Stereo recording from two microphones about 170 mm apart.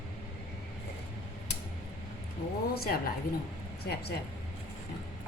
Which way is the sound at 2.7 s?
65° left (ahead or behind).